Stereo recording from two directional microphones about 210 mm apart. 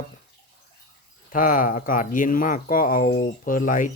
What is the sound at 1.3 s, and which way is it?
Speech, 40° left (ahead or behind).